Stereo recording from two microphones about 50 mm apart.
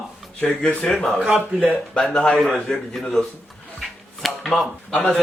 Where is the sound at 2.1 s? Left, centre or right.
Centre.